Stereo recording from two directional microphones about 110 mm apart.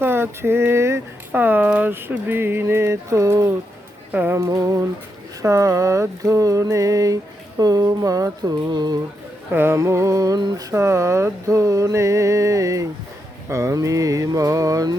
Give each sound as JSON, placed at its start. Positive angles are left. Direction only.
{"t": 0.0, "sound": "speech", "side_deg": -20}
{"t": 4.1, "sound": "speech", "side_deg": -20}
{"t": 4.4, "sound": "a sound", "side_deg": -30}
{"t": 5.4, "sound": "speech", "side_deg": -30}
{"t": 7.6, "sound": "a sound", "side_deg": -35}
{"t": 9.5, "sound": "speech", "side_deg": -20}